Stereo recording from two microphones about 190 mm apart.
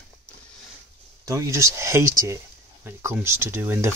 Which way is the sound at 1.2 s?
15° right (ahead or behind).